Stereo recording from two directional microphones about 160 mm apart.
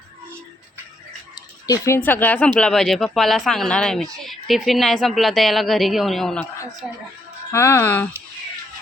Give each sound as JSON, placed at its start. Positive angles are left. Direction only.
{"t": 1.6, "sound": "speech", "side_deg": 20}
{"t": 7.5, "sound": "speech", "side_deg": 15}